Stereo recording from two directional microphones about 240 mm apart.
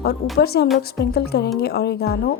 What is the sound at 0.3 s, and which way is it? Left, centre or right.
Speech, left.